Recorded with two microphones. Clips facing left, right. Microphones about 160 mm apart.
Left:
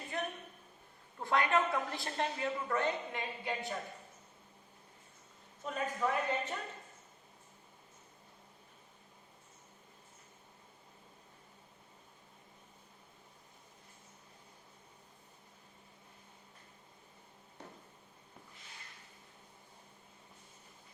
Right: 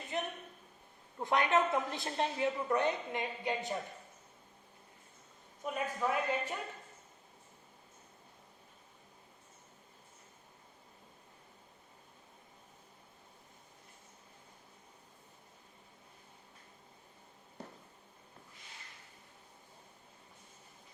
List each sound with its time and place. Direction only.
0.1 s a sound: 20° right (ahead or behind)
1.2 s a woman's voice: 20° right (ahead or behind)
5.6 s speech: 10° right (ahead or behind)